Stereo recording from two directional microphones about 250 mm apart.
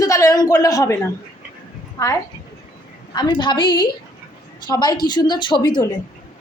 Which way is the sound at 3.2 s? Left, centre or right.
Centre.